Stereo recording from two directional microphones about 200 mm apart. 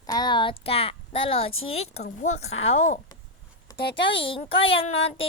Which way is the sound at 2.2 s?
35° left (ahead or behind).